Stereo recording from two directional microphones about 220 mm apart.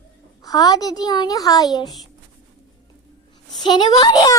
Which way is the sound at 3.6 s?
20° left (ahead or behind).